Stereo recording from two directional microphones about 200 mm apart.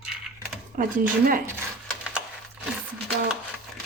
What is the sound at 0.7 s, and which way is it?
Speech, 45° right (ahead or behind).